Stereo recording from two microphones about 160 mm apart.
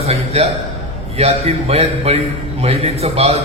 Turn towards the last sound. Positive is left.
turn(degrees=-40)  # may be behind; listen again after turning